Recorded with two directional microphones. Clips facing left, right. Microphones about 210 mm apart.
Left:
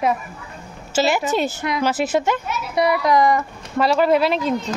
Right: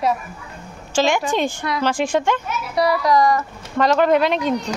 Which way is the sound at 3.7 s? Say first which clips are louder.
Right 1 dB; 5° left (ahead or behind).